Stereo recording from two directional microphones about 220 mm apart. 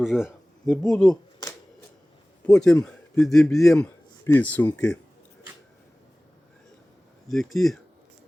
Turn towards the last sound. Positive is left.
turn(degrees=0)  # may be behind; listen again after turning